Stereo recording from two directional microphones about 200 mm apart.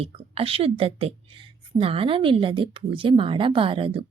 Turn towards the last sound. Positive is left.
turn(degrees=-25)  # may be behind; listen again after turning